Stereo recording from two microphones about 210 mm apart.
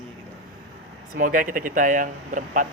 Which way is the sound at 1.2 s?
40° right (ahead or behind).